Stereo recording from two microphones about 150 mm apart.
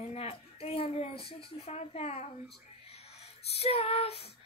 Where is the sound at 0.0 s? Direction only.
45° left (ahead or behind).